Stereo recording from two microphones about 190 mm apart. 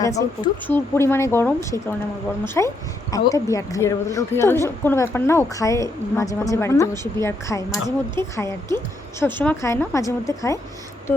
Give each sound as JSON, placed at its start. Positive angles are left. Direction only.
{"t": 0.0, "sound": "a woman's voice", "side_deg": 15}